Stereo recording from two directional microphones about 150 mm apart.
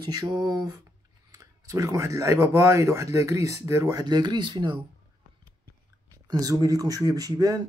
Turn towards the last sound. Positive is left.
turn(degrees=-20)  # may be behind; listen again after turning